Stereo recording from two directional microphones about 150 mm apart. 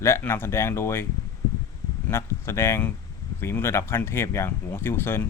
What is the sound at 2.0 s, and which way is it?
Speech, 15° left (ahead or behind).